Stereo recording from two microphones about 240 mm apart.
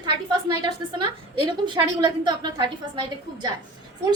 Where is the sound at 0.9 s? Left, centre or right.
Centre.